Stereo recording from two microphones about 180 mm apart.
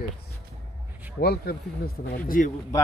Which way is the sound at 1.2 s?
60° left (ahead or behind).